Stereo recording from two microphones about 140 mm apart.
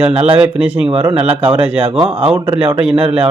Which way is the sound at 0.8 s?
40° right (ahead or behind).